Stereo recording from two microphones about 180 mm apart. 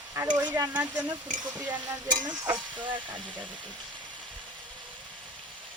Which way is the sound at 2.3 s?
25° right (ahead or behind).